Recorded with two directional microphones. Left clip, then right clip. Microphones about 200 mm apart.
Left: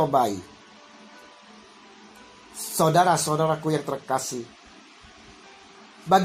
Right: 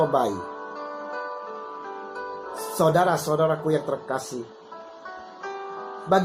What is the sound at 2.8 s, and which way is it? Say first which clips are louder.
Speech: left 1 dB; 30° left (ahead or behind).